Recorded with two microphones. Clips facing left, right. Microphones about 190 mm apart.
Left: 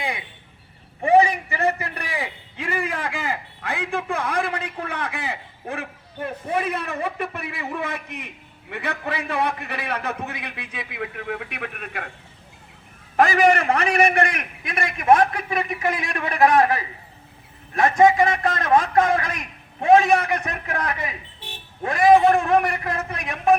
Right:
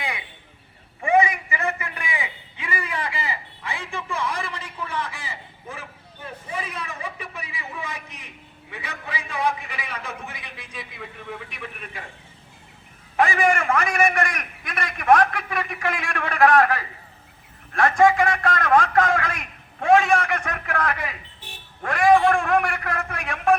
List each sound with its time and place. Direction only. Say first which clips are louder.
1.0 s a sound: left 3 dB; 35° left (ahead or behind); by 8.3 s 60° left (ahead or behind)
8.7 s a man's voice: left 7 dB; 60° left (ahead or behind)
13.1 s a man's voice: left 3 dB; 40° left (ahead or behind); by 23.6 s 20° left (ahead or behind)